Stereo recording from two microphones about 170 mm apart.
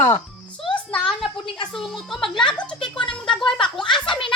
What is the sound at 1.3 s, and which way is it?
Speech, 30° left (ahead or behind).